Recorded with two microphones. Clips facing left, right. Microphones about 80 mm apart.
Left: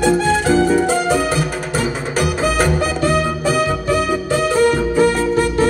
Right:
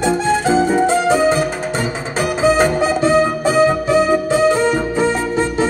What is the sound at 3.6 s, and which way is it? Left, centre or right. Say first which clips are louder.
Music: right 4 dB; right.